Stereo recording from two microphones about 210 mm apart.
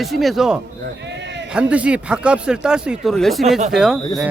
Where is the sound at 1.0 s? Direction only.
55° right (ahead or behind).